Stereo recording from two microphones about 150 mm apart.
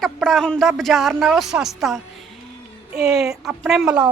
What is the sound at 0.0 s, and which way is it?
A woman's voice, centre (ahead or behind).